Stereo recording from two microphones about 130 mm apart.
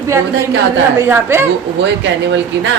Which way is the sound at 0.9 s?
20° right (ahead or behind).